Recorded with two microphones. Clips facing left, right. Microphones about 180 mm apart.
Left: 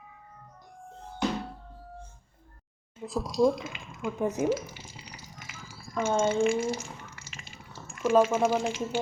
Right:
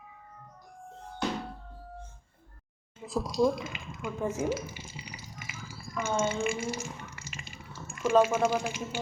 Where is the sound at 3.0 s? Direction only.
Centre (ahead or behind).